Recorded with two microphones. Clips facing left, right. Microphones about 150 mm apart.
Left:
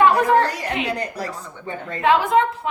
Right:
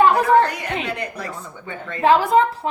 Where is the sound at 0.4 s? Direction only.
35° left (ahead or behind).